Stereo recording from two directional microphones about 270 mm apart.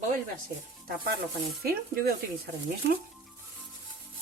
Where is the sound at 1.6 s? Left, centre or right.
Right.